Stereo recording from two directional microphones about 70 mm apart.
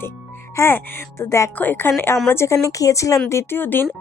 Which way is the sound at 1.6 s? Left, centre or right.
Left.